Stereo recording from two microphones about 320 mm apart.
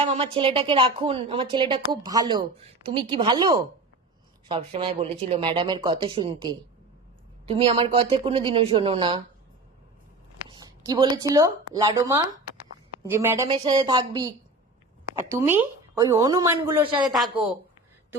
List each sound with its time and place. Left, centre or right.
0.0 s speech: centre
10.5 s speech: centre
17.1 s a woman's voice: centre